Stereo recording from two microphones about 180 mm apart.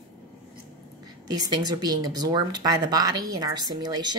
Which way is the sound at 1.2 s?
20° right (ahead or behind).